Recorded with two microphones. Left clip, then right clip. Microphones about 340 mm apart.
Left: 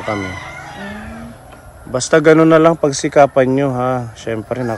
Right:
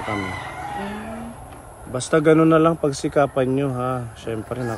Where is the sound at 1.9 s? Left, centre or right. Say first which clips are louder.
Left 6 dB; left.